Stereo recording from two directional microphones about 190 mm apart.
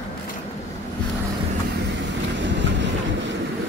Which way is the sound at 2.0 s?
70° right (ahead or behind).